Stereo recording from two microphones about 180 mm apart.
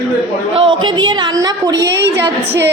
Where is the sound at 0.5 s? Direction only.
30° right (ahead or behind).